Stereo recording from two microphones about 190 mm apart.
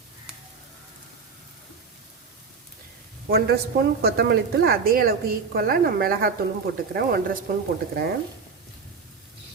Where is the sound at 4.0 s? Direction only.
55° right (ahead or behind).